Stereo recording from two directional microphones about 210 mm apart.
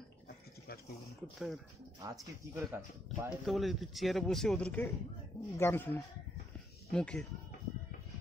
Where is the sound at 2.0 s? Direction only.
10° right (ahead or behind).